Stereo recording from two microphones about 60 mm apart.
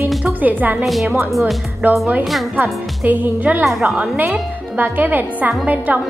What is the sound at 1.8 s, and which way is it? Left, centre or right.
Speech, right.